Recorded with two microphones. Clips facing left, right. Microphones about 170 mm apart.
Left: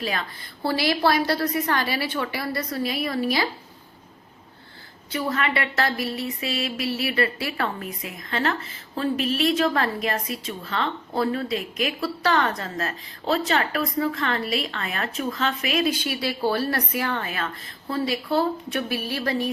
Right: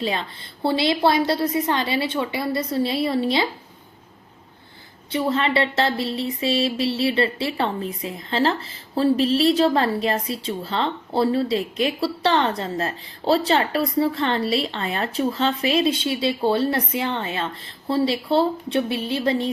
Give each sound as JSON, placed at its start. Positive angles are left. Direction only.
{"t": 0.0, "sound": "speech", "side_deg": -25}
{"t": 5.1, "sound": "speech", "side_deg": -25}